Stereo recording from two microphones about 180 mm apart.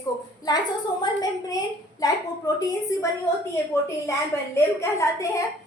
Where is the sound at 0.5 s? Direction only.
20° left (ahead or behind).